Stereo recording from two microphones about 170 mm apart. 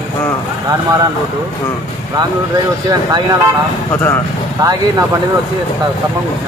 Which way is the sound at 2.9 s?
25° right (ahead or behind).